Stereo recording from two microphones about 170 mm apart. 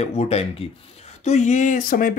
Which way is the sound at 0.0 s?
40° left (ahead or behind).